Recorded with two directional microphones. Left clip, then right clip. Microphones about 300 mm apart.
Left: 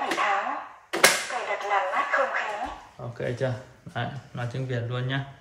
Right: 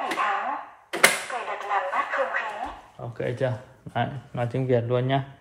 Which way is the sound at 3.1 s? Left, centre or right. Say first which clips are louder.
Right 2 dB; right.